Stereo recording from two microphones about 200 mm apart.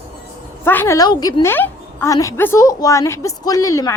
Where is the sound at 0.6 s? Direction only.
10° left (ahead or behind).